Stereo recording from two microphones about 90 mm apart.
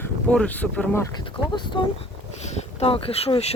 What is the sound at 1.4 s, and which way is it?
Speech, 55° left (ahead or behind).